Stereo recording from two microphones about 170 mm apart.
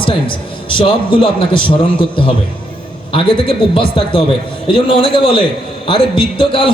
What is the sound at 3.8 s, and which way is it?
A man's voice, 30° left (ahead or behind).